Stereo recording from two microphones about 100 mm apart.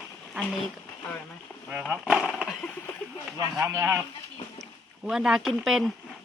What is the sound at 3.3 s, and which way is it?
Speech, 35° right (ahead or behind).